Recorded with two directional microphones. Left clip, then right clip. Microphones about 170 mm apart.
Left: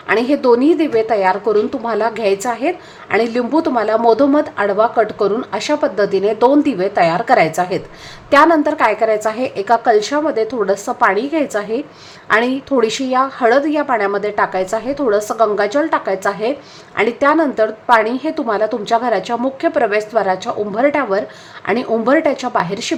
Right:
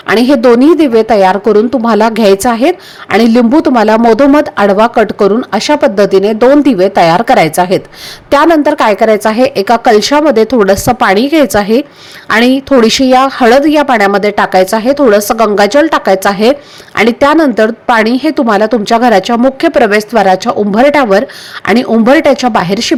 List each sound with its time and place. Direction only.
0.1 s a woman's voice: 40° right (ahead or behind)